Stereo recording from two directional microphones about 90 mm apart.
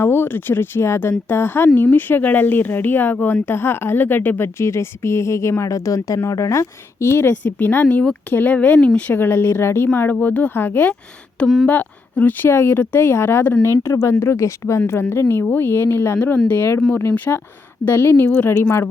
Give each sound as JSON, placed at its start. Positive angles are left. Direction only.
{"t": 0.0, "sound": "speech", "side_deg": 25}
{"t": 11.3, "sound": "speech", "side_deg": 10}
{"t": 11.7, "sound": "speech", "side_deg": 20}